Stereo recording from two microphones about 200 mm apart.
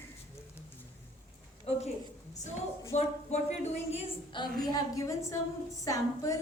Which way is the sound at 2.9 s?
35° left (ahead or behind).